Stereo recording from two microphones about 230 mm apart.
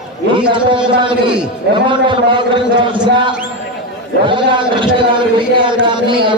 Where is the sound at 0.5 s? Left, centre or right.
Right.